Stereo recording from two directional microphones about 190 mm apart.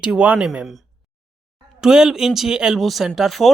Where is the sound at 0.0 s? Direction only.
5° right (ahead or behind).